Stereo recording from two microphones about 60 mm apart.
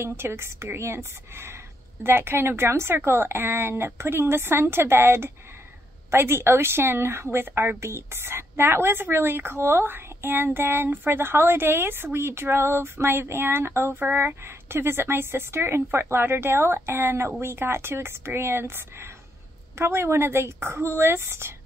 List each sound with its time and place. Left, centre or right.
0.0 s a woman's voice: right